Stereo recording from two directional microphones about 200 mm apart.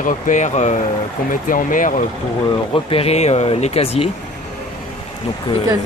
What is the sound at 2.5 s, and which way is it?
Speech, 25° left (ahead or behind).